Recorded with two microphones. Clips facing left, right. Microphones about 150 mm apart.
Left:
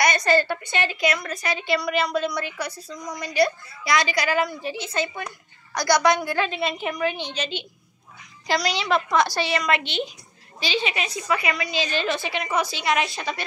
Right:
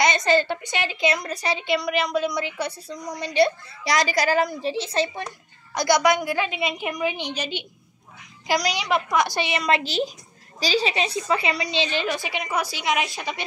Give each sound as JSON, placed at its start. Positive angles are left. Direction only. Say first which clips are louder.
{"t": 0.0, "sound": "a woman's voice", "louder": "even", "side_deg": -20}
{"t": 1.2, "sound": "a woman's voice", "louder": "right 1 dB", "side_deg": -35}
{"t": 2.0, "sound": "a woman's voice", "louder": "even", "side_deg": -15}
{"t": 5.8, "sound": "a woman's voice", "louder": "even", "side_deg": -20}
{"t": 9.6, "sound": "a woman's voice", "louder": "right 2 dB", "side_deg": -30}
{"t": 12.0, "sound": "a woman's voice", "louder": "left 1 dB", "side_deg": -10}